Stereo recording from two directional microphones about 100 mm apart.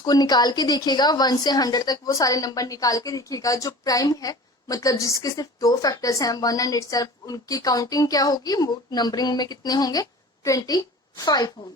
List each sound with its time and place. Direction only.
0.0 s a woman's voice: 45° left (ahead or behind)